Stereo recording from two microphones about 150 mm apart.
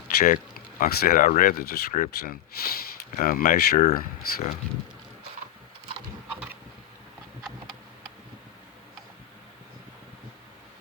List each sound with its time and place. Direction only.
0.2 s speech: 70° left (ahead or behind)